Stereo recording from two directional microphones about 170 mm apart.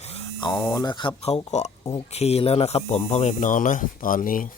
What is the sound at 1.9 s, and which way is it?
Speech, 35° left (ahead or behind).